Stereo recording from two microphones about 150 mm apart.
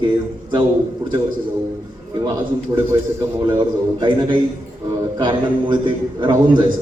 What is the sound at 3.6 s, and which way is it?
A man's voice, 30° right (ahead or behind).